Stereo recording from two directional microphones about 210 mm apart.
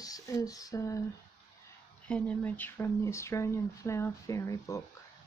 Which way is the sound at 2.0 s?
5° left (ahead or behind).